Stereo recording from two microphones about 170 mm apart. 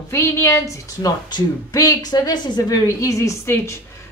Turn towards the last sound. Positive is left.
turn(degrees=15)  # may be behind; listen again after turning